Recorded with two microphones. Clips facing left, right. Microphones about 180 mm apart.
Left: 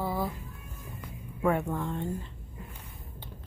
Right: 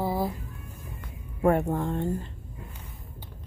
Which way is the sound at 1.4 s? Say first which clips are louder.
Right 4 dB; 40° right (ahead or behind).